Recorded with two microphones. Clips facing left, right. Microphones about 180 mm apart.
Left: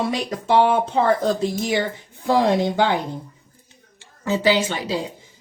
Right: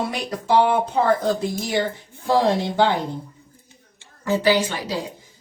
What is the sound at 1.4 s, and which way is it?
Speech, 15° left (ahead or behind).